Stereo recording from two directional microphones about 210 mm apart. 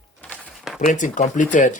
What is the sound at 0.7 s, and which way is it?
Speech, 35° left (ahead or behind).